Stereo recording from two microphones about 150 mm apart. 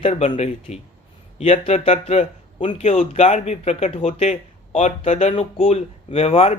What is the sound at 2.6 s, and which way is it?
Speech, 35° left (ahead or behind).